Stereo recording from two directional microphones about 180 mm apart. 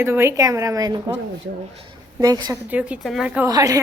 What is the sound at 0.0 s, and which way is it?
A woman's voice, 15° right (ahead or behind).